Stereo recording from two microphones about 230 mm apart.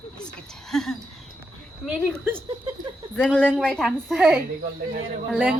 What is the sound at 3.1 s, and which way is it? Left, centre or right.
A woman's voice, centre.